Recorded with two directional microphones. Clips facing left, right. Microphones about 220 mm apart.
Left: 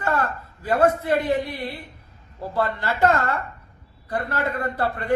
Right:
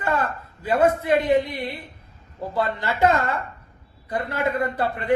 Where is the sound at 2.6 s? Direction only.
15° right (ahead or behind).